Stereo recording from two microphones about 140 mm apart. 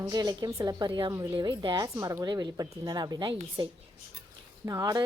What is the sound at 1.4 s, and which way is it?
A woman's voice, 35° right (ahead or behind).